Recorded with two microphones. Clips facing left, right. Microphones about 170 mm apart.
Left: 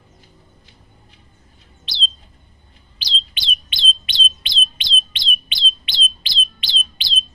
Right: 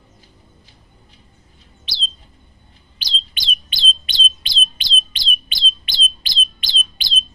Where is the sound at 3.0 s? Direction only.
40° right (ahead or behind).